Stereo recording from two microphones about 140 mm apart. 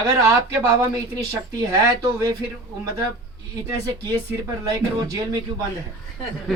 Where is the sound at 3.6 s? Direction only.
20° right (ahead or behind).